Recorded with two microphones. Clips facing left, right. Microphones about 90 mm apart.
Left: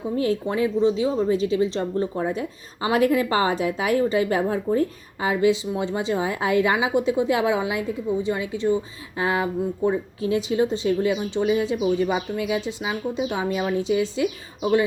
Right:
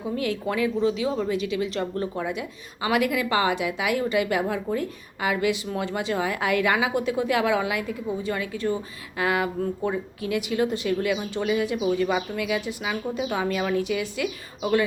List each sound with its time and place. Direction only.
0.2 s speech: 30° left (ahead or behind)